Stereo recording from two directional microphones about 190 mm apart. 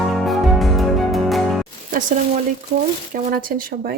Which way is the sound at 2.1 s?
45° right (ahead or behind).